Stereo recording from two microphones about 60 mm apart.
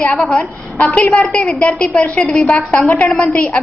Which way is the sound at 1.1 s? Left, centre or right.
Centre.